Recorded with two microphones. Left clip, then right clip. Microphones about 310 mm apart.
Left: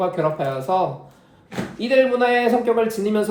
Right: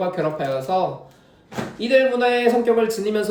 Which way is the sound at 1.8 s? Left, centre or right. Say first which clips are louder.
Even; centre.